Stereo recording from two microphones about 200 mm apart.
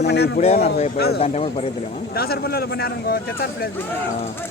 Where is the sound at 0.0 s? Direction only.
55° left (ahead or behind).